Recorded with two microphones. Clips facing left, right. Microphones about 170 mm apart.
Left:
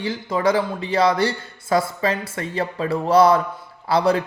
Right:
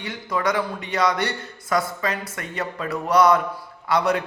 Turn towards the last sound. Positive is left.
turn(degrees=30)  # may be behind; listen again after turning